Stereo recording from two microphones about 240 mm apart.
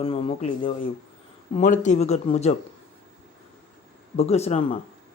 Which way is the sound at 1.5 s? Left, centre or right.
Left.